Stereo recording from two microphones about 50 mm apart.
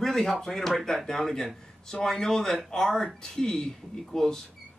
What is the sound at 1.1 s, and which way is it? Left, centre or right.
Speech, centre.